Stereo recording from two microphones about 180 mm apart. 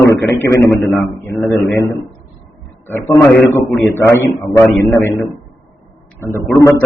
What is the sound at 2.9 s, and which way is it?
A man's voice, 15° left (ahead or behind).